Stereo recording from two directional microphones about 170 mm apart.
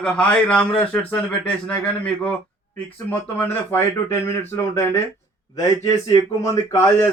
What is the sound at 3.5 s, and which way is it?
A man's voice, 15° left (ahead or behind).